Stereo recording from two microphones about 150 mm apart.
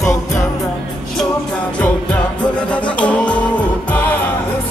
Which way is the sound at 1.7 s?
10° left (ahead or behind).